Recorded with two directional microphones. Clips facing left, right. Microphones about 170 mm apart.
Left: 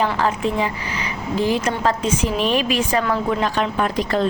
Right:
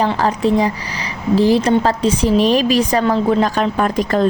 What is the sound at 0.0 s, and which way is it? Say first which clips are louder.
A woman's voice: right 4 dB; 35° right (ahead or behind).